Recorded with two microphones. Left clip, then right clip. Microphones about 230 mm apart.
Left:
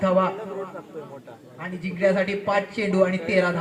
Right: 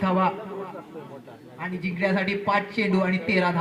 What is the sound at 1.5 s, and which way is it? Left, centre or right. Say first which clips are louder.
A man's voice: even; right.